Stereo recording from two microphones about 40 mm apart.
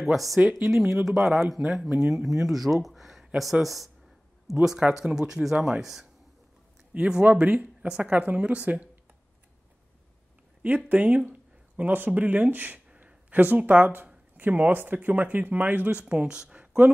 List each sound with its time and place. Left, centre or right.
0.0 s speech: centre
0.4 s speech: right
0.7 s speech: centre
4.6 s speech: centre
6.9 s speech: right
10.9 s speech: right
11.2 s a sound: right
12.1 s speech: right
13.0 s a sound: right
13.7 s speech: right
16.0 s speech: right